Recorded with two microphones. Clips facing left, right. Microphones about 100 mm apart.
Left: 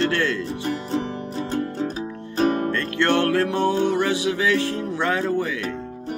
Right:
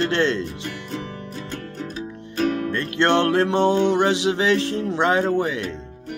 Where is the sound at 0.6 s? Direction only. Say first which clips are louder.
Left 6 dB; 30° left (ahead or behind).